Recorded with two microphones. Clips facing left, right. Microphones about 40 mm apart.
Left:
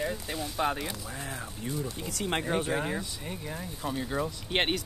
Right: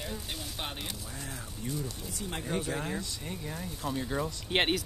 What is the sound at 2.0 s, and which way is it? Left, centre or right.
Speech, left.